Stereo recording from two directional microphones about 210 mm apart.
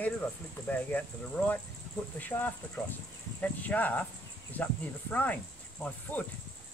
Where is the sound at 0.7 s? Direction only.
5° left (ahead or behind).